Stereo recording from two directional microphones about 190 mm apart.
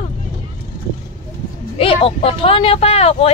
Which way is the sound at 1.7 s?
30° left (ahead or behind).